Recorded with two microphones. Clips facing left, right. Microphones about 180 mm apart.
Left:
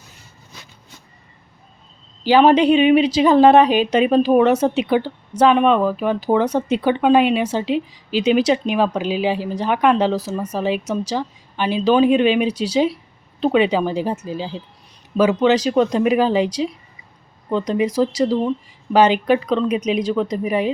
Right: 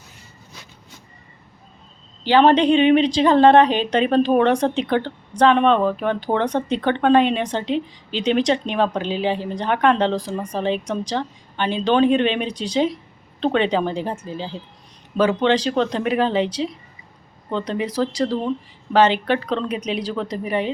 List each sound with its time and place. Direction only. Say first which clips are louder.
2.2 s a woman's voice: left 2 dB; 10° left (ahead or behind)
19.8 s speech: left 5 dB; 35° right (ahead or behind)
20.4 s a woman's voice: left 3 dB; 10° left (ahead or behind)